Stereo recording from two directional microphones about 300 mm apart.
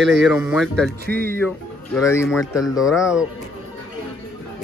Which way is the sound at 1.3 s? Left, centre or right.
Centre.